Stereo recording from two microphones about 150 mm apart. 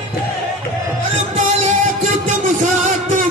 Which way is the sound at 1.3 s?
55° right (ahead or behind).